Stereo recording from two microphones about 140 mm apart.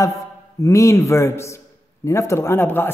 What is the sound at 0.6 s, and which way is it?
A woman's voice, 20° left (ahead or behind).